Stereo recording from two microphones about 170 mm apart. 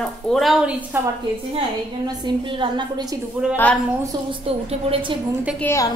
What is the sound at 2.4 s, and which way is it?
Speech, 30° right (ahead or behind).